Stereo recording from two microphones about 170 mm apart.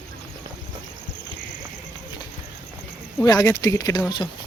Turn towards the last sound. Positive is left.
turn(degrees=25)  # may be behind; listen again after turning